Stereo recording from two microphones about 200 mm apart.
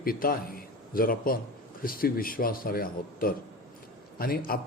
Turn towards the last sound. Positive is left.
turn(degrees=45)  # may be behind; listen again after turning